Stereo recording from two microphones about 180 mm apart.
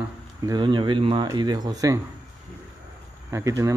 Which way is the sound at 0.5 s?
25° right (ahead or behind).